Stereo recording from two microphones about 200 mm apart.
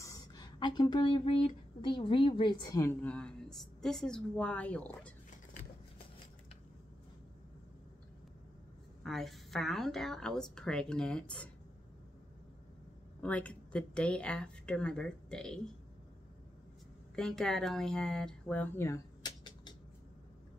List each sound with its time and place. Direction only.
0.0 s speech: 20° left (ahead or behind)
9.0 s a woman's voice: centre (ahead or behind)
13.2 s a woman's voice: 5° left (ahead or behind)
17.1 s speech: 5° left (ahead or behind); by 19.7 s 20° left (ahead or behind)